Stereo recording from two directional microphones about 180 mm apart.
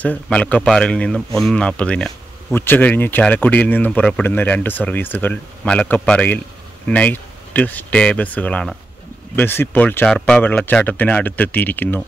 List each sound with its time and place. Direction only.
0.0 s speech: 5° left (ahead or behind)